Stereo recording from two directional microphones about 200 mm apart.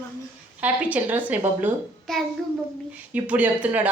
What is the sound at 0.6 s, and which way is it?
Speech, 10° right (ahead or behind).